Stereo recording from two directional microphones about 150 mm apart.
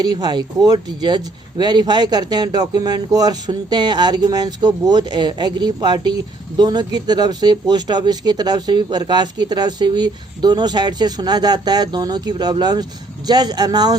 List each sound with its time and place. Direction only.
0.0 s speech: 30° right (ahead or behind)